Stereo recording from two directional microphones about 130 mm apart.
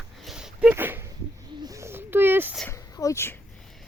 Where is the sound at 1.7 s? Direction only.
20° right (ahead or behind).